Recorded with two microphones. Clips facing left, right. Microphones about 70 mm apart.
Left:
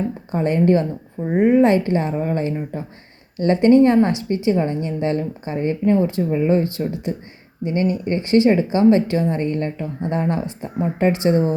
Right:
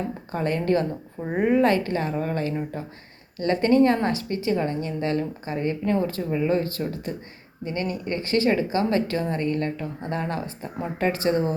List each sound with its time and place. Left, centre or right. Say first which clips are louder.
0.3 s a woman's voice: left 7 dB; left